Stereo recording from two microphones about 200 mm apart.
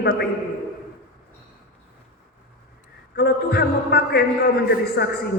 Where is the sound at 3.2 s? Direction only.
55° left (ahead or behind).